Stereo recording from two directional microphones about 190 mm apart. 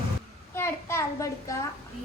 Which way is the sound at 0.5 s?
15° left (ahead or behind).